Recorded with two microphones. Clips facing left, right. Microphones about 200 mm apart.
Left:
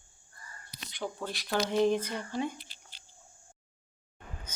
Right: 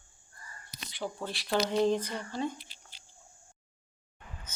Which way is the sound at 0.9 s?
5° right (ahead or behind).